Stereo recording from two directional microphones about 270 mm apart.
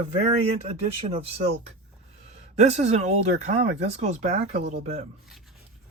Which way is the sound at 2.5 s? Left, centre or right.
Right.